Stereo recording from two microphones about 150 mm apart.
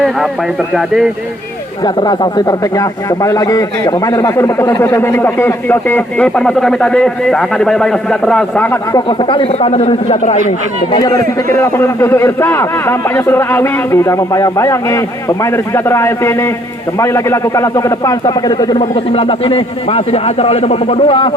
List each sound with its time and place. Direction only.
0.7 s speech: 5° right (ahead or behind)
1.8 s speech: 30° left (ahead or behind); by 8.8 s 10° left (ahead or behind)
9.0 s speech: 35° left (ahead or behind)
10.9 s a man's voice: 25° left (ahead or behind)
18.8 s speech: 40° left (ahead or behind)